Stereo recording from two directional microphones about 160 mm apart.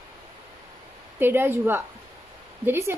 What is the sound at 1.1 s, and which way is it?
Speech, 15° right (ahead or behind).